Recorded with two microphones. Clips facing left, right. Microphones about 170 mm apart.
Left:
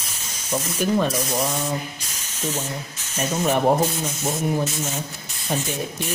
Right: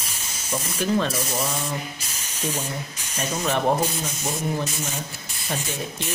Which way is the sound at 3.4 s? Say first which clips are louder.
Left 4 dB; 15° left (ahead or behind).